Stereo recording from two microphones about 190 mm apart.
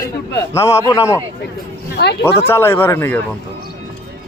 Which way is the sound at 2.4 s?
10° left (ahead or behind).